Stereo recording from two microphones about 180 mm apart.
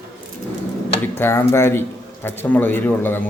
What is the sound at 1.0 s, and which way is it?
A man's voice, 15° left (ahead or behind).